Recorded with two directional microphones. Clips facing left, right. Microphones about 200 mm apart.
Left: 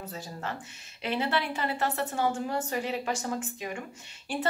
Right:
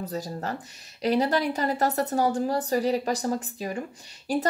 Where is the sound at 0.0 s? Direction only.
40° right (ahead or behind).